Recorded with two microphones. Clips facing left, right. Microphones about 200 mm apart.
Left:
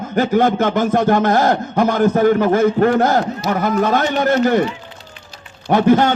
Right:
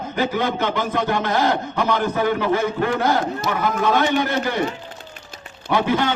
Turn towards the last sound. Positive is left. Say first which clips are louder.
# left 7 dB
turn(degrees=45)  # may be behind; listen again after turning